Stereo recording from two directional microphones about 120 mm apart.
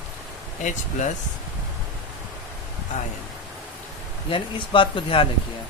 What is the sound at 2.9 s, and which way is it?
Speech, 90° left.